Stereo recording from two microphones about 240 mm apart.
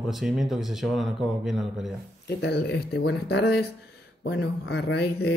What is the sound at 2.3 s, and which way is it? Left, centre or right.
Speech, left.